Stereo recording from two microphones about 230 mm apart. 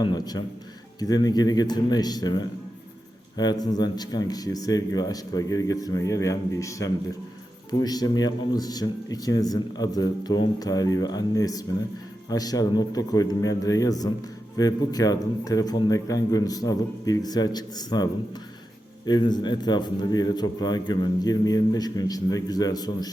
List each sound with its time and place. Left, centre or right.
0.0 s a man's voice: centre